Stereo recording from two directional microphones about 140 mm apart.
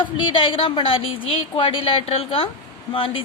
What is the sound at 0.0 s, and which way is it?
A woman's voice, 35° left (ahead or behind).